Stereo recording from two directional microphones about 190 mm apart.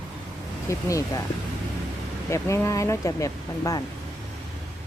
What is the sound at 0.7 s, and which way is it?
Speech, 15° left (ahead or behind).